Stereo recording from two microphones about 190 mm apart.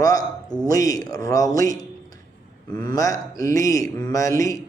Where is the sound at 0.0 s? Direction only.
20° left (ahead or behind).